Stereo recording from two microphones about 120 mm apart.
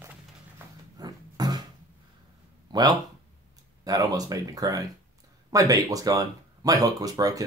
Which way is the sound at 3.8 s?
30° right (ahead or behind).